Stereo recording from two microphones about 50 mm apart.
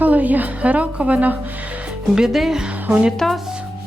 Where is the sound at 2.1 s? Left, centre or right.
Centre.